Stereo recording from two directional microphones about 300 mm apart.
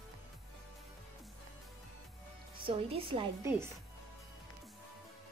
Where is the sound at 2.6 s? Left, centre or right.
Centre.